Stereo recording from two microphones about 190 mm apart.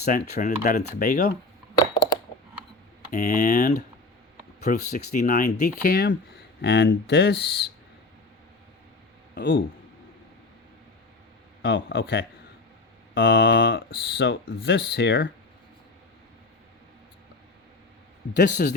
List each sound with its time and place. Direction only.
0.0 s speech: 50° left (ahead or behind)
1.8 s a sound: 20° left (ahead or behind)
3.1 s speech: 45° left (ahead or behind); by 7.7 s 65° left (ahead or behind)
9.3 s speech: 60° left (ahead or behind)
11.6 s speech: 65° left (ahead or behind)
18.3 s speech: 60° left (ahead or behind)